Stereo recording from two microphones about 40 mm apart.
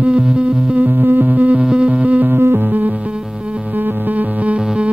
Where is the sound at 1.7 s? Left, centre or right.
Right.